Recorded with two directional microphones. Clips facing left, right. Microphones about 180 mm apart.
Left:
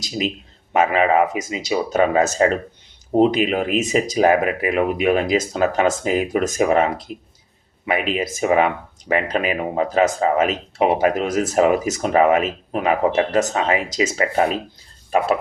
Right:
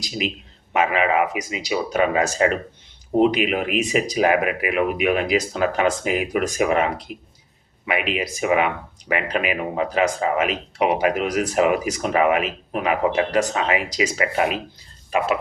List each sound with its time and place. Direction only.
0.2 s speech: 30° left (ahead or behind)